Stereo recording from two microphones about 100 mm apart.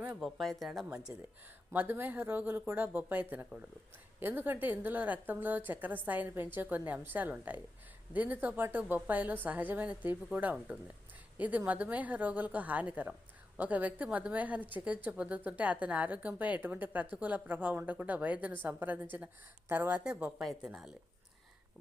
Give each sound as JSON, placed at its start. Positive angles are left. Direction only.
{"t": 0.2, "sound": "a woman's voice", "side_deg": 0}
{"t": 1.7, "sound": "a woman's voice", "side_deg": -20}
{"t": 20.4, "sound": "a woman's voice", "side_deg": 0}